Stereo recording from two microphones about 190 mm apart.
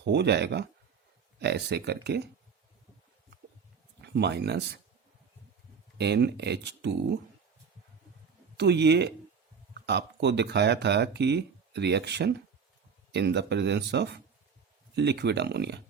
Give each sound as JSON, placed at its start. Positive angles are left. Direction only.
{"t": 0.0, "sound": "speech", "side_deg": -60}
{"t": 4.0, "sound": "speech", "side_deg": -60}
{"t": 6.0, "sound": "speech", "side_deg": -60}
{"t": 8.5, "sound": "speech", "side_deg": -60}